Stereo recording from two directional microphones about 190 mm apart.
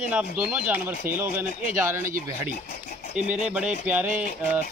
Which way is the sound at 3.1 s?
5° right (ahead or behind).